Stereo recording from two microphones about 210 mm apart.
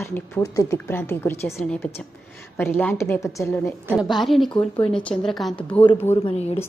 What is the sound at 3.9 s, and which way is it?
Speech, centre (ahead or behind).